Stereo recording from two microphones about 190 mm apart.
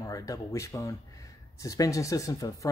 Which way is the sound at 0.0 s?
15° left (ahead or behind).